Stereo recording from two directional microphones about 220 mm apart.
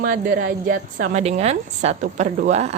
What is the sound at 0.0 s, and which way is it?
A woman's voice, 40° right (ahead or behind).